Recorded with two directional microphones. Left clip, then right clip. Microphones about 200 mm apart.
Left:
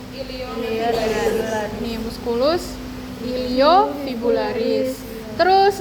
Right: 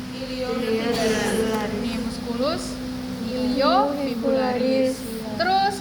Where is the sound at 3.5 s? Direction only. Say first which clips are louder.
Left 6 dB; 55° left (ahead or behind).